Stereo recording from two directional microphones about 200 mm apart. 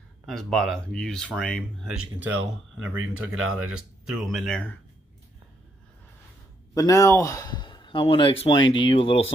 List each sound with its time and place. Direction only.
0.3 s speech: centre (ahead or behind)
6.7 s speech: 15° left (ahead or behind)